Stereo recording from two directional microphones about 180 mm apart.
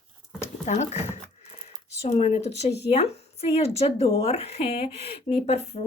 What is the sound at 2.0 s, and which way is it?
Speech, 35° left (ahead or behind).